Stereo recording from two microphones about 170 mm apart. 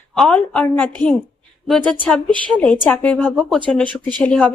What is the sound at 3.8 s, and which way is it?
Speech, 25° right (ahead or behind).